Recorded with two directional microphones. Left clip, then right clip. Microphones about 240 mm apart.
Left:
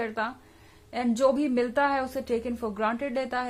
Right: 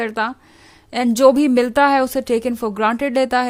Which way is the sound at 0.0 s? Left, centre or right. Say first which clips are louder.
Right 9 dB; right.